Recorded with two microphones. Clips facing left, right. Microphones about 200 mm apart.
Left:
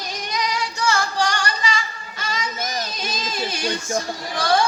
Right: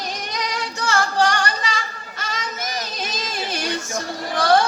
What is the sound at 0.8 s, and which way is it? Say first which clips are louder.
Music: right 3 dB; 55° right (ahead or behind).